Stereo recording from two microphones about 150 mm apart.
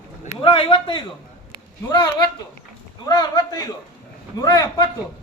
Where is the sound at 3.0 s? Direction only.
25° left (ahead or behind).